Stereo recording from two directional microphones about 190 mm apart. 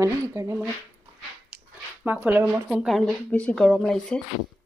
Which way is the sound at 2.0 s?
10° right (ahead or behind).